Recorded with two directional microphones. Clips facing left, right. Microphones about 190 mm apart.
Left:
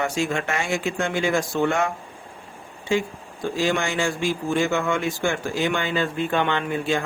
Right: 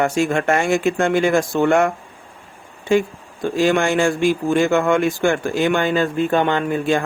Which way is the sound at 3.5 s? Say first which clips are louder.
Right 7 dB; 55° right (ahead or behind).